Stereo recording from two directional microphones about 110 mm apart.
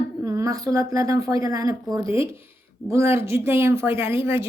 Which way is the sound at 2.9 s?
25° right (ahead or behind).